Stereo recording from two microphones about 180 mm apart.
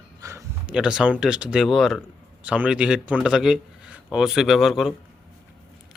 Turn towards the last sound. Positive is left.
turn(degrees=0)  # may be behind; listen again after turning